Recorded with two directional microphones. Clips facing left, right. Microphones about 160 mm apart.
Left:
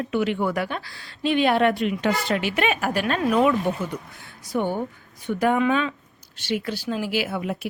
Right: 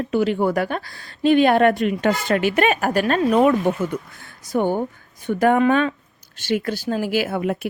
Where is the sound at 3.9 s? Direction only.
90° right.